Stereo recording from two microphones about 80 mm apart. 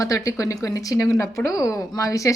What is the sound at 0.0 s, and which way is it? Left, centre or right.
A woman's voice, left.